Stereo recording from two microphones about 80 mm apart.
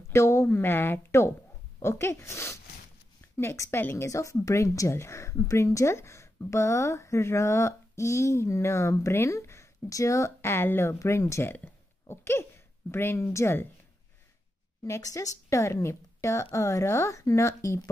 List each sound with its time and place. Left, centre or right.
0.1 s a woman's voice: left
11.5 s burping: left
12.9 s speech: left
14.9 s speech: left